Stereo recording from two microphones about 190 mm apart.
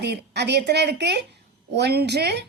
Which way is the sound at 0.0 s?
60° right (ahead or behind).